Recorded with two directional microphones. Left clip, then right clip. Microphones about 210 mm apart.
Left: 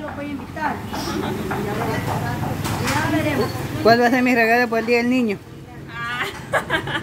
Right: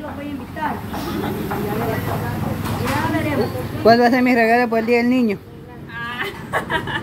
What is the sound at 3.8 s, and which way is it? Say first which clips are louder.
Speech: right 2 dB; centre (ahead or behind).